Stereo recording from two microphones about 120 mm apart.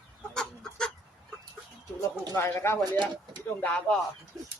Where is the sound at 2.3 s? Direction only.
20° left (ahead or behind).